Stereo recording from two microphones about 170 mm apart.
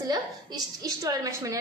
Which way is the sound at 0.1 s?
25° right (ahead or behind).